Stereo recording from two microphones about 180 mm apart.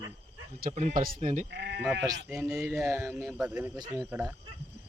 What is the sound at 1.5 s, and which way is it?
Speech, 70° right (ahead or behind).